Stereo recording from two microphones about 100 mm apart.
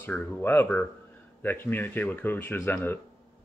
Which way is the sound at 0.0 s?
15° left (ahead or behind).